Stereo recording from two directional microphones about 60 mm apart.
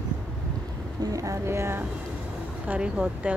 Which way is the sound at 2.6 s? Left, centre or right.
Right.